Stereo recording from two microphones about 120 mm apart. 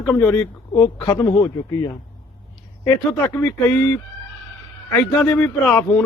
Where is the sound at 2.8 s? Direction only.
20° left (ahead or behind).